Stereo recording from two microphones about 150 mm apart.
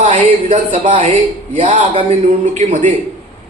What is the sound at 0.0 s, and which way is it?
Speech, 45° right (ahead or behind).